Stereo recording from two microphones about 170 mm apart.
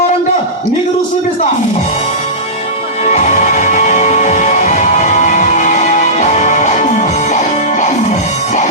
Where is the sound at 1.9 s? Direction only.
40° left (ahead or behind).